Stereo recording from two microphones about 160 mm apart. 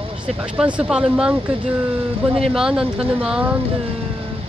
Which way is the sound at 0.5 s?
10° right (ahead or behind).